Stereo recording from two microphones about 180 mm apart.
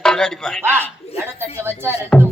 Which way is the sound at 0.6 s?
10° right (ahead or behind).